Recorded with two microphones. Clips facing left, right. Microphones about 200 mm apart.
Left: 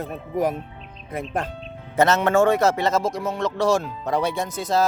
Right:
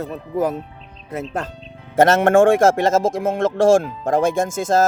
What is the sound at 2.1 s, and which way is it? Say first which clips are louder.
Speech: right 5 dB; 50° right (ahead or behind).